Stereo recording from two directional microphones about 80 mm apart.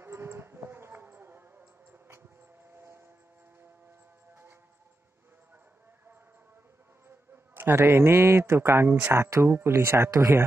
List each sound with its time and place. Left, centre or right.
0.0 s music: right
7.5 s speech: right